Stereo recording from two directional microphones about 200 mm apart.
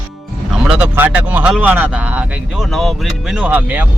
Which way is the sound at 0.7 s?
5° right (ahead or behind).